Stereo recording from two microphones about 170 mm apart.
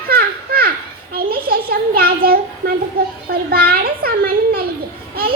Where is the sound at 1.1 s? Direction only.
65° right (ahead or behind).